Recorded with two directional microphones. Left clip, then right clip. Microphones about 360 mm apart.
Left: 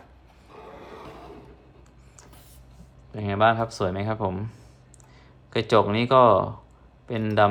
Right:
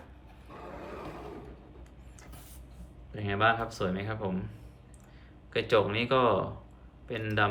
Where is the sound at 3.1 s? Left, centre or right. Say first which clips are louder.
Left 6 dB; centre.